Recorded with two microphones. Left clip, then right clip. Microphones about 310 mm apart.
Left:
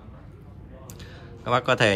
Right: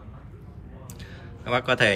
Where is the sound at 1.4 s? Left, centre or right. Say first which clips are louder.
Left 1 dB; centre.